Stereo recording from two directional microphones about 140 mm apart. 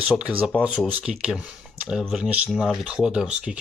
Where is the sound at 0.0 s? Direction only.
10° right (ahead or behind).